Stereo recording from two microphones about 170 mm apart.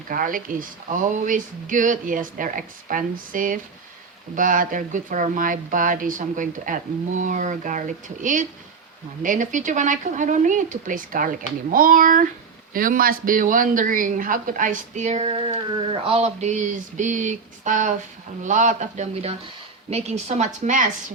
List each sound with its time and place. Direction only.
0.1 s a woman's voice: 55° right (ahead or behind)